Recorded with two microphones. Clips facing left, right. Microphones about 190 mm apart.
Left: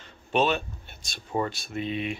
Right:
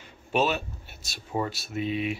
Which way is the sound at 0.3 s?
5° right (ahead or behind).